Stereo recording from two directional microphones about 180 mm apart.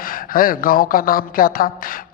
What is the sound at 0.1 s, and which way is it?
A woman's voice, 50° left (ahead or behind).